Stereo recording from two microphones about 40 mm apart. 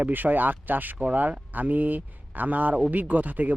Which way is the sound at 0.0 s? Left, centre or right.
Right.